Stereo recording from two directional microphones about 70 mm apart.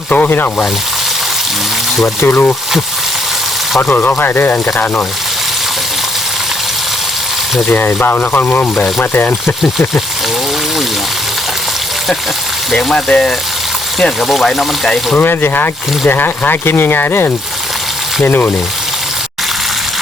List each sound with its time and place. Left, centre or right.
0.1 s speech: left
2.2 s speech: left
3.8 s speech: left
7.7 s speech: left
12.7 s speech: centre
15.2 s speech: left